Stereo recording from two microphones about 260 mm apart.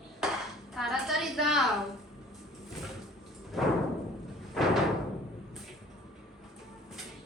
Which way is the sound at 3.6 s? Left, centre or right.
Centre.